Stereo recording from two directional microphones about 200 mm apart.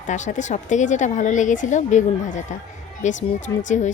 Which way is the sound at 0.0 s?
40° left (ahead or behind).